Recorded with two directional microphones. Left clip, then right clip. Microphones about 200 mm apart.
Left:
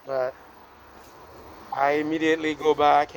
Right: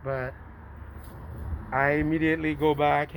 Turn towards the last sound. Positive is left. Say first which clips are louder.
# left 4 dB
turn(degrees=35)  # may be behind; listen again after turning